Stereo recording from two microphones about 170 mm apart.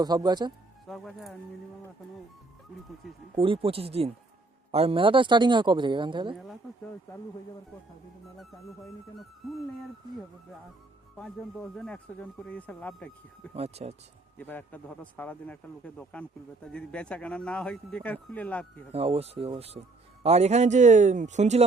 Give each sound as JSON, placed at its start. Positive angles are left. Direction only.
{"t": 0.0, "sound": "speech", "side_deg": -25}
{"t": 0.9, "sound": "speech", "side_deg": 0}
{"t": 3.3, "sound": "speech", "side_deg": -30}
{"t": 11.2, "sound": "speech", "side_deg": 5}
{"t": 13.5, "sound": "speech", "side_deg": -35}
{"t": 14.3, "sound": "speech", "side_deg": 10}
{"t": 18.9, "sound": "speech", "side_deg": -35}